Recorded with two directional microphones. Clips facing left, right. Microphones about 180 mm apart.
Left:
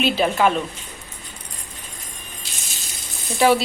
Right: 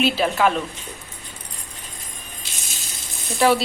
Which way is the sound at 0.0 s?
Centre (ahead or behind).